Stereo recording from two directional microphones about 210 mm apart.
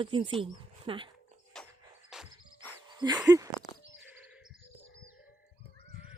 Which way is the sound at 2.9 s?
20° right (ahead or behind).